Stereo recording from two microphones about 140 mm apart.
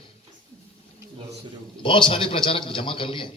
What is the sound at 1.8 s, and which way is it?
A man's voice, 35° left (ahead or behind).